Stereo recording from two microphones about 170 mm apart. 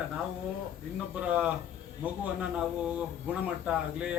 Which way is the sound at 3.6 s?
5° right (ahead or behind).